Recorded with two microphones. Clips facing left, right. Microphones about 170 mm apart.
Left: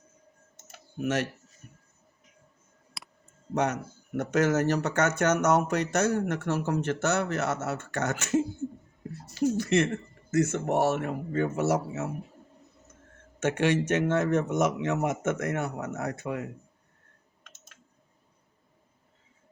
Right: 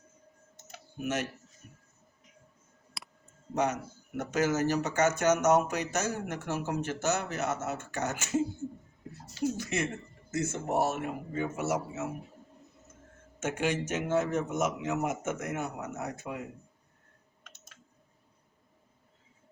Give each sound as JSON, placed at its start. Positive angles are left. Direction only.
{"t": 3.0, "sound": "a sound", "side_deg": 0}
{"t": 3.5, "sound": "speech", "side_deg": 65}
{"t": 9.2, "sound": "speech", "side_deg": 60}
{"t": 10.3, "sound": "speech", "side_deg": 75}
{"t": 13.4, "sound": "speech", "side_deg": 70}